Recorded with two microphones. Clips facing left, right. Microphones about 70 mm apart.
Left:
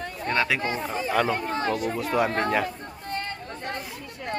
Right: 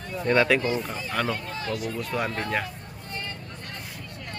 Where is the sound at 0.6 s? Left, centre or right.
Left.